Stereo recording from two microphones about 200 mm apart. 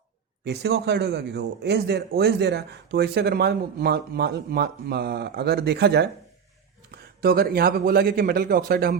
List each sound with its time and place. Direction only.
0.4 s speech: 55° right (ahead or behind)